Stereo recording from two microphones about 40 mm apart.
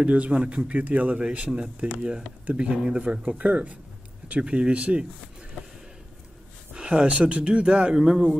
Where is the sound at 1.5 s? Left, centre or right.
Right.